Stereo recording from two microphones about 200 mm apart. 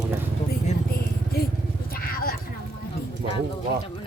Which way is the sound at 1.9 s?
45° left (ahead or behind).